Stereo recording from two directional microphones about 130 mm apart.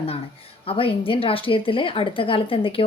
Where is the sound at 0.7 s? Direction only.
45° left (ahead or behind).